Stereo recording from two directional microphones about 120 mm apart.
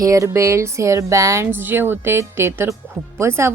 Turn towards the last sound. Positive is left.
turn(degrees=-20)  # may be behind; listen again after turning